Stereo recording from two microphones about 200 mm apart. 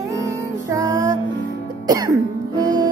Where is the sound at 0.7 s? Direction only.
15° right (ahead or behind).